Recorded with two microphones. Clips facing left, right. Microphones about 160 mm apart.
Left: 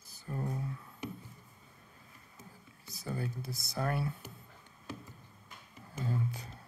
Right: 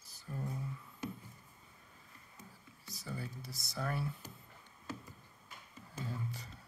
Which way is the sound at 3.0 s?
55° left (ahead or behind).